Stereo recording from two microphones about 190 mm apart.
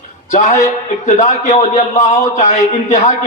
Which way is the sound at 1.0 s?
35° left (ahead or behind).